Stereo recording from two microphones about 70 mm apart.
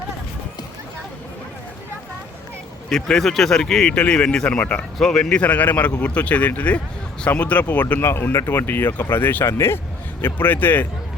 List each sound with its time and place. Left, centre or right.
2.9 s a man's voice: centre; by 8.0 s left
8.0 s speech: left
8.4 s speech: left